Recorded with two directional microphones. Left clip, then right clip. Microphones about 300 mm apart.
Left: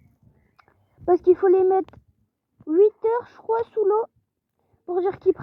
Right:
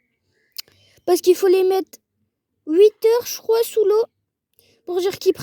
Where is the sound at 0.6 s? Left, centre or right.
Right.